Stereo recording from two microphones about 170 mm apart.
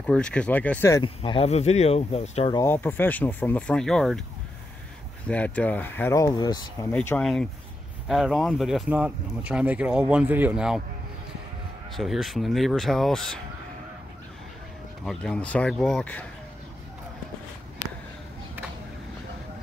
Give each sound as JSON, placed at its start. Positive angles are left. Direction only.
{"t": 0.0, "sound": "speech", "side_deg": 5}
{"t": 1.0, "sound": "speech", "side_deg": 30}
{"t": 2.5, "sound": "speech", "side_deg": 15}
{"t": 5.2, "sound": "speech", "side_deg": 10}
{"t": 6.9, "sound": "speech", "side_deg": 10}
{"t": 12.0, "sound": "speech", "side_deg": 0}
{"t": 15.0, "sound": "speech", "side_deg": 5}